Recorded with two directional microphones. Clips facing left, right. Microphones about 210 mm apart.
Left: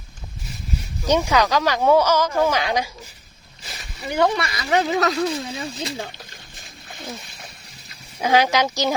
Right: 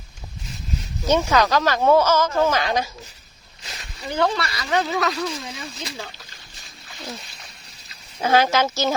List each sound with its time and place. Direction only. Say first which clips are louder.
1.0 s speech: even; 15° left (ahead or behind)
5.0 s speech: left 4 dB; 30° left (ahead or behind)
8.2 s speech: even; 15° left (ahead or behind)